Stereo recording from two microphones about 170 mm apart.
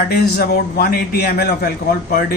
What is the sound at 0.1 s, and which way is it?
A man's voice, 65° left (ahead or behind).